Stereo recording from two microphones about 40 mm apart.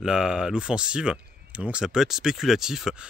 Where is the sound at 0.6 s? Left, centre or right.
Right.